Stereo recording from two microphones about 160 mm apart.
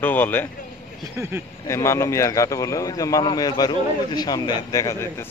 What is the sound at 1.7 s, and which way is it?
Speech, 20° left (ahead or behind).